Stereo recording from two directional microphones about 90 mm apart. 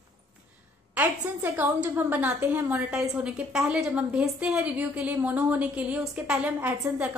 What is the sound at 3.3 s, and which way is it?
A woman's voice, 5° right (ahead or behind).